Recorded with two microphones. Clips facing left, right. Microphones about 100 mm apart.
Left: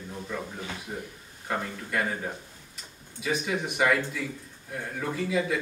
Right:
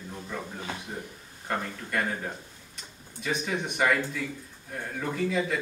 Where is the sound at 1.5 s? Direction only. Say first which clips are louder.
Even; 5° left (ahead or behind).